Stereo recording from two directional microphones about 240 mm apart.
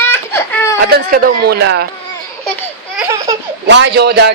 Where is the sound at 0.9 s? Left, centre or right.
Right.